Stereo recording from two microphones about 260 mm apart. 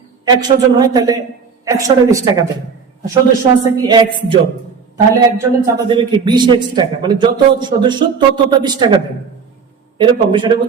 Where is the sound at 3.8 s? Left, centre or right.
Centre.